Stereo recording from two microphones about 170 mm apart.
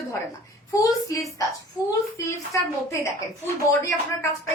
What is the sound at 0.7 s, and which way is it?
A woman's voice, 20° left (ahead or behind).